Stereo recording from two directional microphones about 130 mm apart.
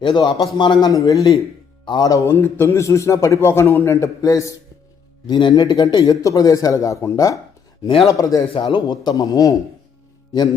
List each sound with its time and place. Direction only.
0.0 s a man's voice: 35° left (ahead or behind)
8.5 s a man's voice: 40° left (ahead or behind)